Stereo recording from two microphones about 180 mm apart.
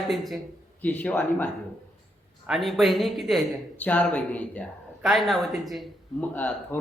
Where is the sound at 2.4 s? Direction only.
Centre (ahead or behind).